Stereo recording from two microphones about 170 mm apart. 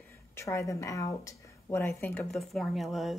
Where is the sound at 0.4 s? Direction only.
15° left (ahead or behind).